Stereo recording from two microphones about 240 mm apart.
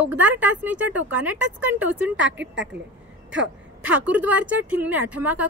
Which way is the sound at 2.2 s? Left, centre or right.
Right.